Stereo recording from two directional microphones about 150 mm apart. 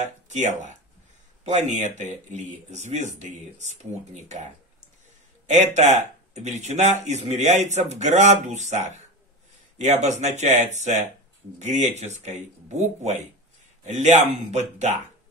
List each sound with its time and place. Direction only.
0.0 s speech: 50° right (ahead or behind)
5.5 s speech: 50° right (ahead or behind)